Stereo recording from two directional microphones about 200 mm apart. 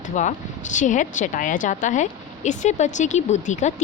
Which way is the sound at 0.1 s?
40° left (ahead or behind).